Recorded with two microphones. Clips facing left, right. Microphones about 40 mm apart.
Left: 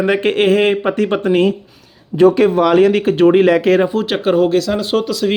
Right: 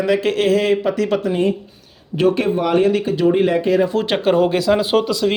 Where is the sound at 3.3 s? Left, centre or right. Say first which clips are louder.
Left 4 dB; left.